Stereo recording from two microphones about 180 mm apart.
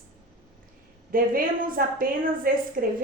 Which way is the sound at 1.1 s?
50° right (ahead or behind).